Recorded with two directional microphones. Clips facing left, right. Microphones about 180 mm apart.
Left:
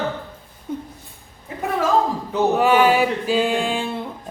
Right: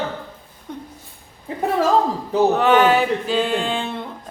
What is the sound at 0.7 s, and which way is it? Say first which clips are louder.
Speech: left 5 dB; 5° left (ahead or behind).